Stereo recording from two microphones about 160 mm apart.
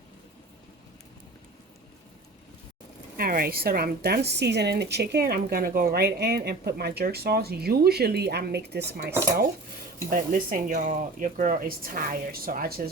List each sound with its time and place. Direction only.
3.2 s a woman's voice: 65° right (ahead or behind); by 9.1 s 90° right
10.1 s speech: 60° right (ahead or behind)